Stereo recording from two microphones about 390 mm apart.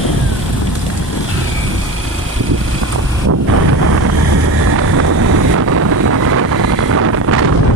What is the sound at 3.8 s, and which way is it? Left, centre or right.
Vehicle, right.